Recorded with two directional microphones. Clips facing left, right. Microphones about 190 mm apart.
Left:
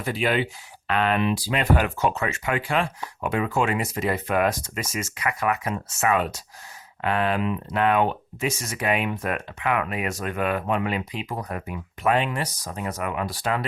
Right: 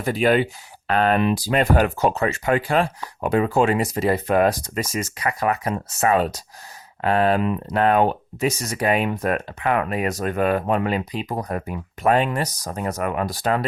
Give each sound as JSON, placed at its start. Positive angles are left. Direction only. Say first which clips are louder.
{"t": 0.0, "sound": "speech", "louder": "right 5 dB", "side_deg": -45}